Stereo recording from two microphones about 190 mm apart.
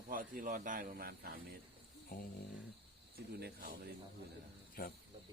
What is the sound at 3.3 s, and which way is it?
Speech, 55° right (ahead or behind).